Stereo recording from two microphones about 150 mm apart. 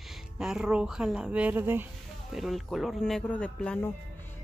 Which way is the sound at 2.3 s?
Centre (ahead or behind).